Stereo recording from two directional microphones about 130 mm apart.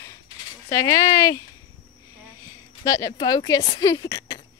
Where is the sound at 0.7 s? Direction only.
25° left (ahead or behind).